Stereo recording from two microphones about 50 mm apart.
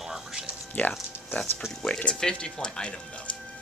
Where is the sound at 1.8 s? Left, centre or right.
Centre.